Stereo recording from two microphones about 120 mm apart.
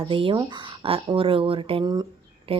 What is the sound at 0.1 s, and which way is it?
A woman's voice, 45° right (ahead or behind).